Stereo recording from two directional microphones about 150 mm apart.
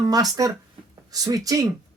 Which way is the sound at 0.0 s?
25° right (ahead or behind).